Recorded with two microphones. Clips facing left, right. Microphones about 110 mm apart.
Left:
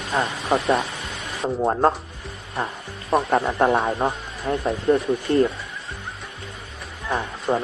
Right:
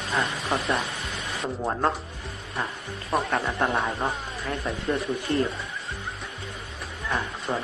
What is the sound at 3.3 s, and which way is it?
A man's voice, 30° left (ahead or behind).